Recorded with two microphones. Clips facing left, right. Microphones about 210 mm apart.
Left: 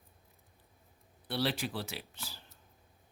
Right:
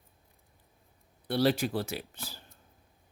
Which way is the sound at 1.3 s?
45° right (ahead or behind).